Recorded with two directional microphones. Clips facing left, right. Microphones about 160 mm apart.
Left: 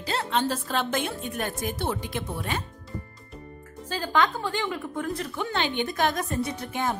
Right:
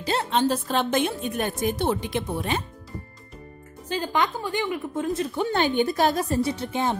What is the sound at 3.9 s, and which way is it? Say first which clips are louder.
A woman's voice: even; 15° right (ahead or behind).